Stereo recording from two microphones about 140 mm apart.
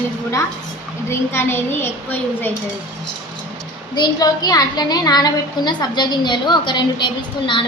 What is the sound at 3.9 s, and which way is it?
A woman's voice, 30° left (ahead or behind).